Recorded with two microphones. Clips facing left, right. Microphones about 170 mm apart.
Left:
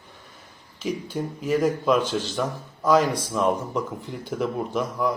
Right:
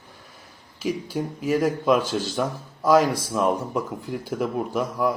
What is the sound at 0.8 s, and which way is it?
Speech, 10° right (ahead or behind).